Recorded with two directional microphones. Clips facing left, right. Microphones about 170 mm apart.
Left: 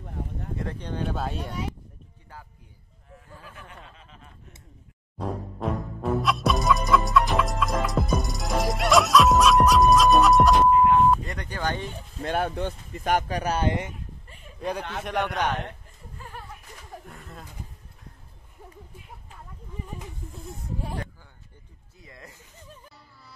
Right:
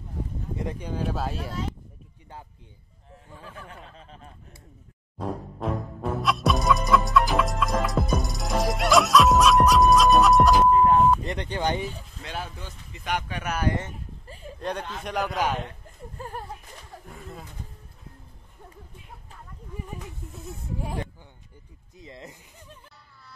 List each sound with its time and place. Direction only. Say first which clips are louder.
0.6 s speech: right 1 dB; 15° right (ahead or behind)
3.5 s a sound: right 3 dB; 35° right (ahead or behind)
5.2 s music: even; centre (ahead or behind)
11.2 s speech: right 3 dB; 25° right (ahead or behind)
12.2 s speech: left 11 dB; 55° left (ahead or behind); by 13.7 s 30° left (ahead or behind)
14.2 s a sound: right 7 dB; 35° right (ahead or behind)
14.8 s a man's voice: left 2 dB; 70° left (ahead or behind)
15.0 s speech: even; centre (ahead or behind)
16.2 s a sound: right 6 dB; 45° right (ahead or behind)
17.0 s pigeon: right 2 dB; centre (ahead or behind)
21.9 s speech: right 5 dB; 20° right (ahead or behind)